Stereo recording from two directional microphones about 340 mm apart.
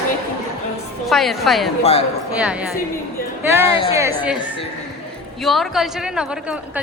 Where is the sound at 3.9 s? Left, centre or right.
Centre.